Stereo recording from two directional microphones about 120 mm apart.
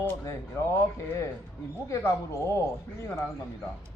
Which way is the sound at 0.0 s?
20° left (ahead or behind).